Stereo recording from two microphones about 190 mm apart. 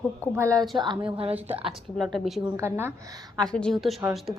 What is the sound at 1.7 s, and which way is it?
Speech, centre (ahead or behind).